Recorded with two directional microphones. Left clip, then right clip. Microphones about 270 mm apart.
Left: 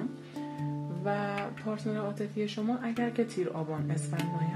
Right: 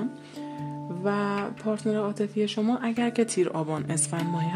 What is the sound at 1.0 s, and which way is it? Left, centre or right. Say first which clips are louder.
Speech: right 5 dB; right.